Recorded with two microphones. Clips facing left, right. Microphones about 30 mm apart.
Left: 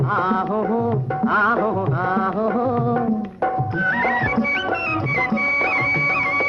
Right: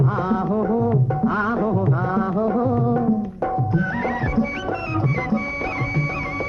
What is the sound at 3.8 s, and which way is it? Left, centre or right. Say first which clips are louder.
Music: left 5 dB; left.